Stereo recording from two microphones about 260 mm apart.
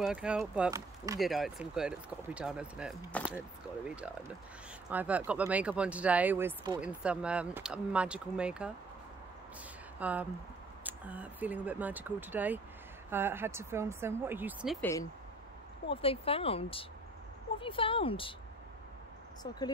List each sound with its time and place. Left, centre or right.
0.0 s speech: centre
1.2 s speech: centre
9.9 s speech: centre
14.8 s speech: centre
15.9 s speech: left